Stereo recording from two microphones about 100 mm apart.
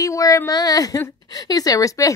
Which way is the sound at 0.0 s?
35° left (ahead or behind).